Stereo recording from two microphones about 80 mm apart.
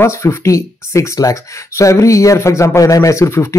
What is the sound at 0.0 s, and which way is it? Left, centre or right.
A man's voice, left.